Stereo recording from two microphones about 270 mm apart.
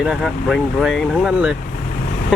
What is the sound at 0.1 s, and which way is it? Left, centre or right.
Speech, centre.